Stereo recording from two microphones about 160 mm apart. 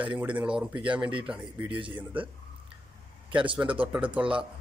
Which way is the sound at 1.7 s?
30° right (ahead or behind).